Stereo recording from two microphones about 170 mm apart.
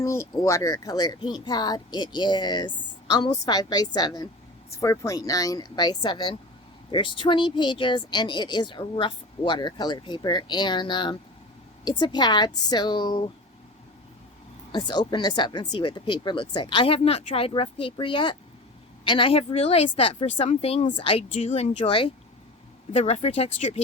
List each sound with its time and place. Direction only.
0.0 s speech: 15° left (ahead or behind)
14.7 s speech: 25° left (ahead or behind)
22.9 s speech: 40° left (ahead or behind)